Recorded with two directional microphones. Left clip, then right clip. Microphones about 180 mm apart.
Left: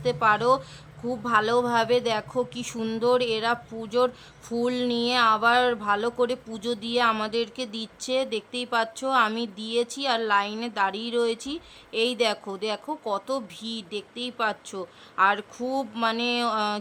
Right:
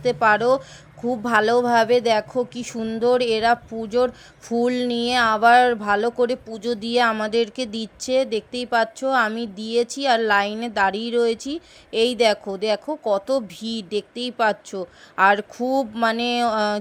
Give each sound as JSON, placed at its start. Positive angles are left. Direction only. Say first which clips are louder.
{"t": 0.0, "sound": "speech", "louder": "right 4 dB", "side_deg": -20}
{"t": 3.0, "sound": "speech", "louder": "right 5 dB", "side_deg": -20}